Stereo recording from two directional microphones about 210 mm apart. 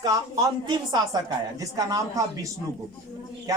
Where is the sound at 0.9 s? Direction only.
20° right (ahead or behind).